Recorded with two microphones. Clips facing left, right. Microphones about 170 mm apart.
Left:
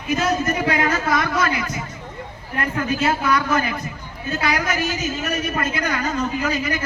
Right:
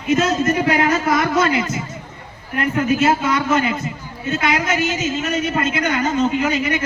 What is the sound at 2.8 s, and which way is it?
A man's voice, 20° right (ahead or behind).